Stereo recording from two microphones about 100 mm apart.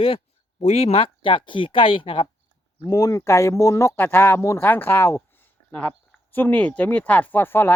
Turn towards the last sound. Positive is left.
turn(degrees=20)  # may be behind; listen again after turning